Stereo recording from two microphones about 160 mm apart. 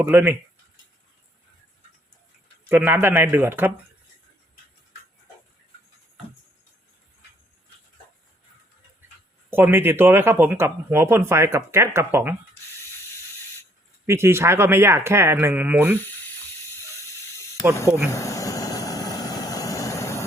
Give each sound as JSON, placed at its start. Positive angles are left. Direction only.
{"t": 0.0, "sound": "speech", "side_deg": -15}
{"t": 2.6, "sound": "speech", "side_deg": -15}
{"t": 9.5, "sound": "speech", "side_deg": -10}
{"t": 14.1, "sound": "speech", "side_deg": -15}
{"t": 17.8, "sound": "speech", "side_deg": -10}
{"t": 18.1, "sound": "vehicle", "side_deg": 20}